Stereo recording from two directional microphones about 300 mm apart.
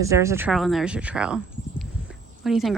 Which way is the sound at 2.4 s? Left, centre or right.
Centre.